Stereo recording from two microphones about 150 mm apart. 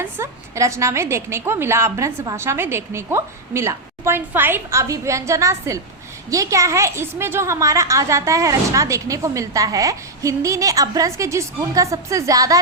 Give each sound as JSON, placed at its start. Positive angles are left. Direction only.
{"t": 0.0, "sound": "a woman's voice", "side_deg": -20}